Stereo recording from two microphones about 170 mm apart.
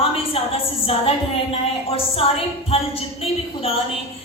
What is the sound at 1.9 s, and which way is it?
Music, 35° left (ahead or behind).